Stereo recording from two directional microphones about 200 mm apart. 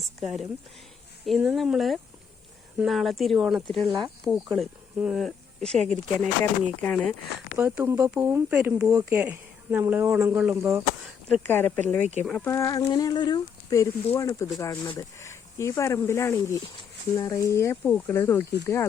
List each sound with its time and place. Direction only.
0.2 s speech: centre (ahead or behind)
7.5 s speech: 10° right (ahead or behind)
11.4 s speech: 10° left (ahead or behind)